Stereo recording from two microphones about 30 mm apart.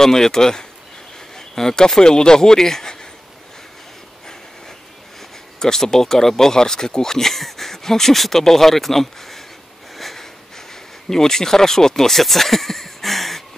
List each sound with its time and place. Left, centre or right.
0.0 s speech: centre
5.6 s speech: centre
9.9 s sniff: centre
10.7 s speech: centre